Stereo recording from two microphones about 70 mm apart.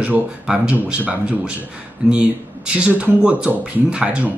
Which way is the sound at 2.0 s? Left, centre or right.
Centre.